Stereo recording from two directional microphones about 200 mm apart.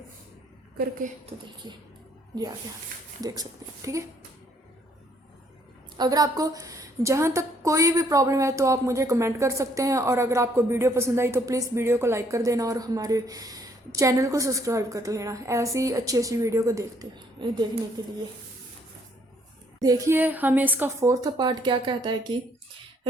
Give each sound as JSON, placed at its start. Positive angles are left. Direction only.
{"t": 1.6, "sound": "a sound", "side_deg": -20}
{"t": 3.2, "sound": "speech", "side_deg": -20}
{"t": 6.0, "sound": "a woman's voice", "side_deg": -20}
{"t": 19.8, "sound": "a woman's voice", "side_deg": -15}